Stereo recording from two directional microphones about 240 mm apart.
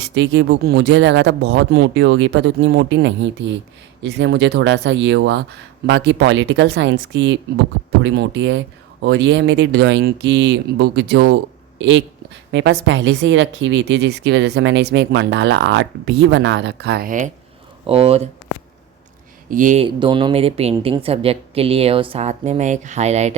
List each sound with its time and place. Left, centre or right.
0.0 s speech: right
19.5 s speech: right